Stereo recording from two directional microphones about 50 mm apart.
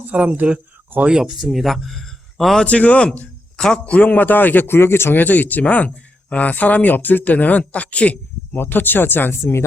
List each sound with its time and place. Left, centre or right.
0.1 s speech: right
1.0 s a man's voice: centre
2.6 s speech: left
5.1 s speech: left
8.5 s speech: left
9.4 s speech: left